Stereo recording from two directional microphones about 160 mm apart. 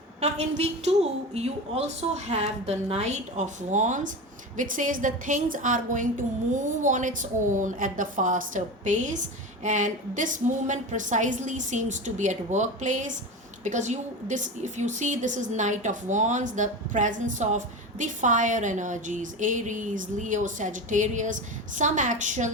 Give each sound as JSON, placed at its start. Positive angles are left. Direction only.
{"t": 0.2, "sound": "a woman's voice", "side_deg": -45}